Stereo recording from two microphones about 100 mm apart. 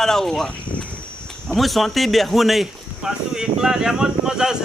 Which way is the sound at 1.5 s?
Centre (ahead or behind).